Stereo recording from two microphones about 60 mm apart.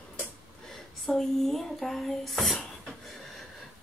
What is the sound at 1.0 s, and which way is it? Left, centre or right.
Speech, centre.